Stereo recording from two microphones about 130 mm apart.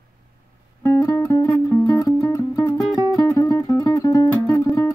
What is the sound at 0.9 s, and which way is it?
Music, 25° left (ahead or behind).